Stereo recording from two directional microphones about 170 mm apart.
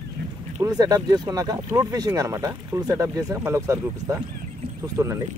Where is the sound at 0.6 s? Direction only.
20° right (ahead or behind).